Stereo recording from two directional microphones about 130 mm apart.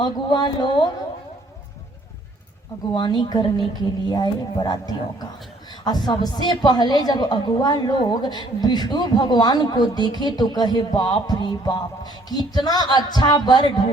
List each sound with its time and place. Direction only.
0.0 s a woman's voice: 35° left (ahead or behind)
2.9 s a woman's voice: 35° left (ahead or behind)